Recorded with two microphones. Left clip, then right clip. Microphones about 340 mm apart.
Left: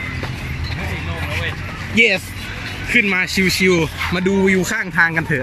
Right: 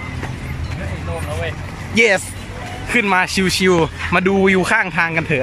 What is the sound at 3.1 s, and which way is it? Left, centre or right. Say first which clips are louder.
Speech: right 1 dB; centre.